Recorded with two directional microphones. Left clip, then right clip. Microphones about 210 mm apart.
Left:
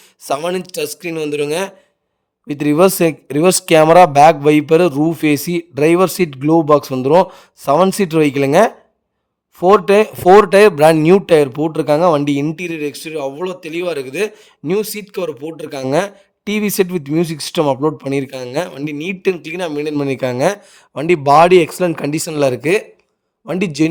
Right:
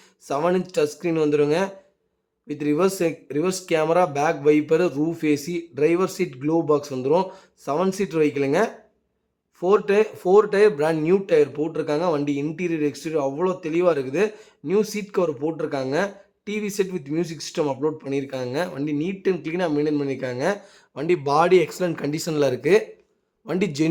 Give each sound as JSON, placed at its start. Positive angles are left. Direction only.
{"t": 0.3, "sound": "a man's voice", "side_deg": 45}